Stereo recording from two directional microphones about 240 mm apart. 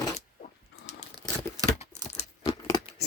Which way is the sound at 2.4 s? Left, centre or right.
Centre.